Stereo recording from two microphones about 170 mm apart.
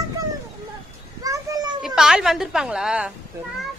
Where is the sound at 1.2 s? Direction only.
20° right (ahead or behind).